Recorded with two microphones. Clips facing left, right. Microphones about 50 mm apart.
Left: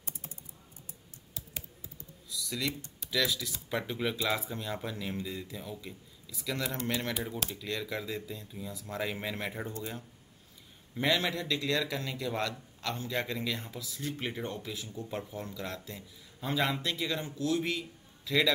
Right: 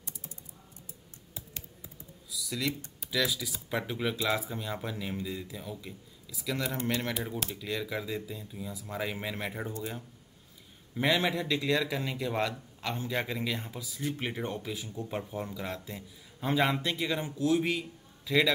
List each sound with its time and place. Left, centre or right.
2.2 s typing: centre
3.0 s speech: centre
11.0 s a man's voice: centre